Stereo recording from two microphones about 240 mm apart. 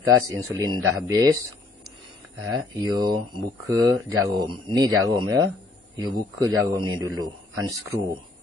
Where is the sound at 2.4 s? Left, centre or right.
Centre.